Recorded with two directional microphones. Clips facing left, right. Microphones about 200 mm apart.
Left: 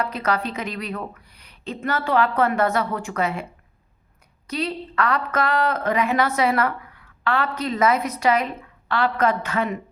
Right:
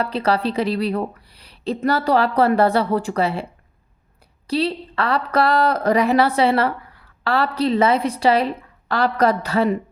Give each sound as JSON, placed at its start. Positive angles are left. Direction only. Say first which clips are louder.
{"t": 0.0, "sound": "a woman's voice", "louder": "right 4 dB", "side_deg": -30}
{"t": 4.4, "sound": "a woman's voice", "louder": "right 6 dB", "side_deg": -30}